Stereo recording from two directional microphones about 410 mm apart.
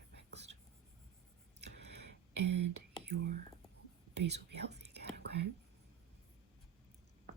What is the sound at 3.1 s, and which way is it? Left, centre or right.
Whispering, right.